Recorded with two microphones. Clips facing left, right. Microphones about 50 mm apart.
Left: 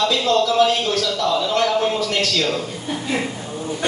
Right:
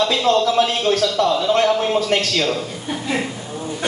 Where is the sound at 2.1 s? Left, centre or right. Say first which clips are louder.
Right 3 dB; right.